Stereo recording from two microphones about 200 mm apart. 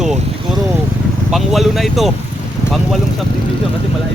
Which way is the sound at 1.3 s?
Centre (ahead or behind).